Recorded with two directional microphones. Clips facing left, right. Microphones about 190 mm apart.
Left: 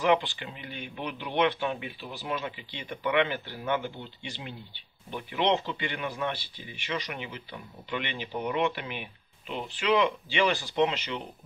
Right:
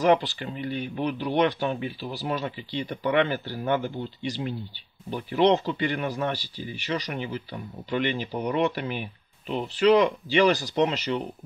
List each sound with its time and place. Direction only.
0.0 s speech: 40° right (ahead or behind)